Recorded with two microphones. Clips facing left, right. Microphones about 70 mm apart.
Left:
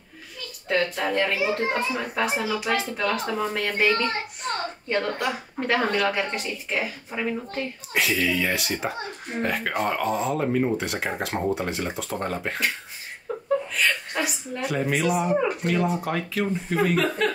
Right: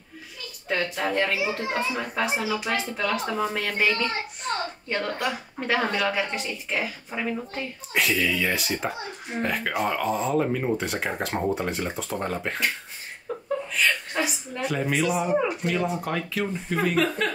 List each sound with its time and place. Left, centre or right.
1.0 s speech: centre
1.4 s a child's voice: left
2.0 s speech: centre
3.0 s speech: centre
13.3 s chuckle: centre
13.7 s speech: centre